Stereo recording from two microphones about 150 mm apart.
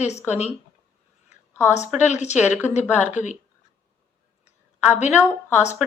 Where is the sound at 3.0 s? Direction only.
55° left (ahead or behind).